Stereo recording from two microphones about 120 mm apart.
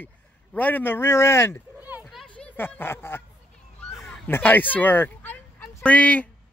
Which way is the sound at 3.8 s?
5° left (ahead or behind).